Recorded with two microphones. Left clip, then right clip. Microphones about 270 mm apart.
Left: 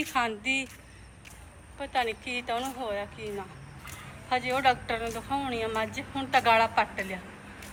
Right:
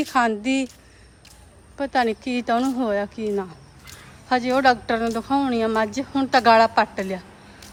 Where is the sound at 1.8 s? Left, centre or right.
Right.